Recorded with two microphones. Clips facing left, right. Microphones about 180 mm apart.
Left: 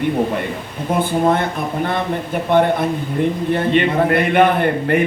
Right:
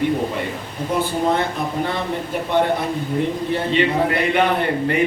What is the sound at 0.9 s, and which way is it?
Speech, 55° left (ahead or behind).